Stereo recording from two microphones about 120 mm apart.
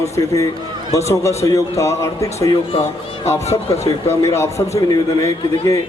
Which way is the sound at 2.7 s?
65° left (ahead or behind).